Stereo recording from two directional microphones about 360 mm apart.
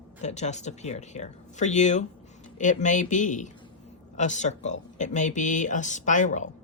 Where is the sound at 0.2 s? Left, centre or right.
Centre.